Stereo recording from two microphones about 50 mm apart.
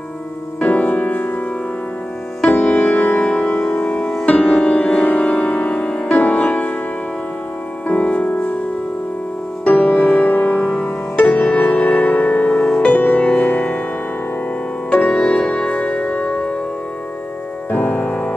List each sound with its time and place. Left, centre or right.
0.6 s music: left
2.5 s music: left
4.0 s music: centre
4.3 s music: left
7.9 s music: left
9.7 s music: left
14.9 s music: left
17.6 s music: left